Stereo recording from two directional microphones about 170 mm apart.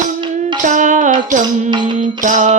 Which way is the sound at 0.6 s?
45° right (ahead or behind).